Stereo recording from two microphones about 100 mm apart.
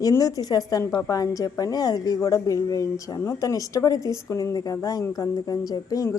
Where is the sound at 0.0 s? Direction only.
35° left (ahead or behind).